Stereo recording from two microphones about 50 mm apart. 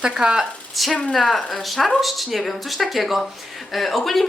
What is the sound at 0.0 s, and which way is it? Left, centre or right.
Speech, centre.